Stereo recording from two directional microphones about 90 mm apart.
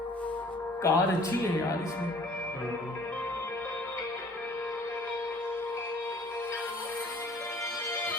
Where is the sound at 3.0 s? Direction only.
25° left (ahead or behind).